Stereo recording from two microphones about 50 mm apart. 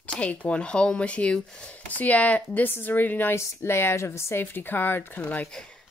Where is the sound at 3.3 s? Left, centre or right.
Left.